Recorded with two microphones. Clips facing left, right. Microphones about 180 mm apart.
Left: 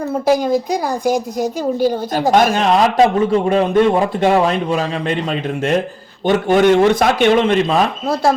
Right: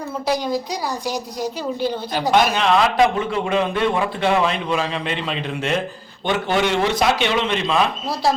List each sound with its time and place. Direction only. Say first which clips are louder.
0.1 s a woman's voice: left 7 dB; 50° left (ahead or behind)